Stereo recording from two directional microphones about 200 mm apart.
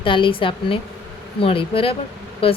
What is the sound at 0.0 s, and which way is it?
Speech, 25° left (ahead or behind).